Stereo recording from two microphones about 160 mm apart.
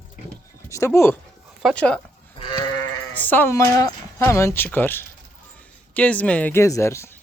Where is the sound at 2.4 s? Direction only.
30° left (ahead or behind).